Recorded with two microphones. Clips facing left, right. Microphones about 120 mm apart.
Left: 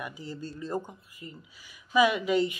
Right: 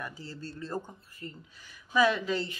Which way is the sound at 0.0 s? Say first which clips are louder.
Left 3 dB; 15° left (ahead or behind).